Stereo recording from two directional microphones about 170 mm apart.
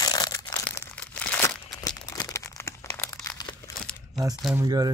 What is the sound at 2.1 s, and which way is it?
Crumpling, 20° left (ahead or behind).